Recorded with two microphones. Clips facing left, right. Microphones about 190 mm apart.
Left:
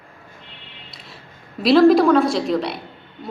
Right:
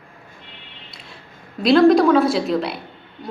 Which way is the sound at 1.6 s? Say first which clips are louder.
Even; centre (ahead or behind).